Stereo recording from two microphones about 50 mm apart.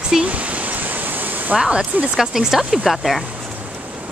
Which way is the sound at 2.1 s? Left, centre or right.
Centre.